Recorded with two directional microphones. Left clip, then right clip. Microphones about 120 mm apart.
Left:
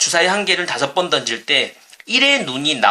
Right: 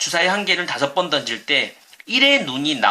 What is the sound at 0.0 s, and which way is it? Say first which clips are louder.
Speech: left 3 dB; 20° left (ahead or behind).